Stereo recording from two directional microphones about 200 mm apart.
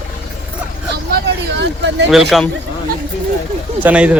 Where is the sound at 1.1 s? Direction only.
60° right (ahead or behind).